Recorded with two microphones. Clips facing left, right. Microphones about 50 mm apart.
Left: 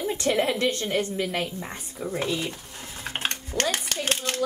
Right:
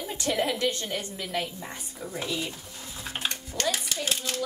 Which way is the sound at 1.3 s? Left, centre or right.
Left.